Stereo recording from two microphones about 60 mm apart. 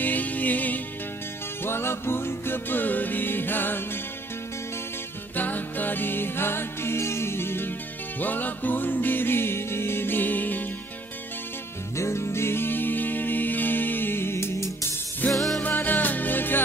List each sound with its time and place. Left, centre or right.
0.0 s music: left
1.6 s music: left
5.3 s music: left
12.0 s music: left
15.3 s music: centre
15.6 s music: left